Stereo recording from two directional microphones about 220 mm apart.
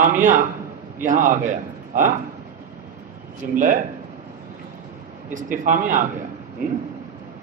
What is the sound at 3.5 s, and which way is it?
Speech, 40° right (ahead or behind).